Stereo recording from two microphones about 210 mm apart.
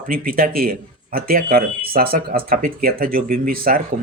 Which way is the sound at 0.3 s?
45° right (ahead or behind).